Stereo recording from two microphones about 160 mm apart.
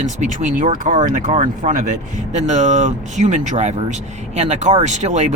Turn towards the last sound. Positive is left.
turn(degrees=-45)  # may be behind; listen again after turning